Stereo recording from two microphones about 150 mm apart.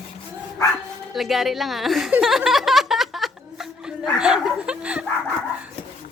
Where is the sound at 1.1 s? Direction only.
Centre (ahead or behind).